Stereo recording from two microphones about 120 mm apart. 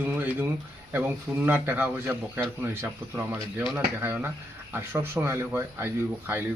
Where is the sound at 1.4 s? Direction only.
15° right (ahead or behind).